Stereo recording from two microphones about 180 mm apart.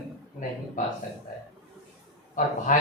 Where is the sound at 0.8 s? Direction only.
45° left (ahead or behind).